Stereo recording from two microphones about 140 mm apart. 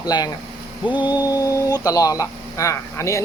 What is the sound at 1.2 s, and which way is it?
Speech, 25° left (ahead or behind).